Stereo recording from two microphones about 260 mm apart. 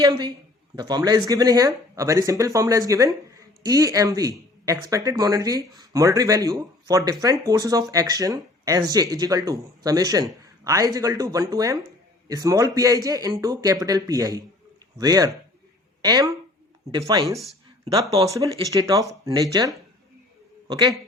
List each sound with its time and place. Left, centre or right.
0.0 s a woman's voice: centre